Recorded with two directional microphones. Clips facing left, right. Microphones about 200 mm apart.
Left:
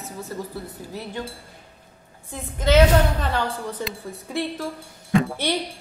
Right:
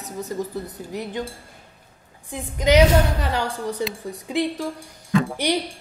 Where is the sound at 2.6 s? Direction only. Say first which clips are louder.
Right 1 dB; 15° right (ahead or behind).